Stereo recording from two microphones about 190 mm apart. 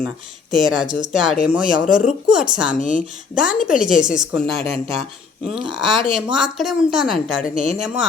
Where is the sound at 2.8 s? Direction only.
40° left (ahead or behind).